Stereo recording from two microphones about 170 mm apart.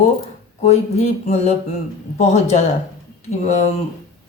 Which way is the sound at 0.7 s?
40° left (ahead or behind).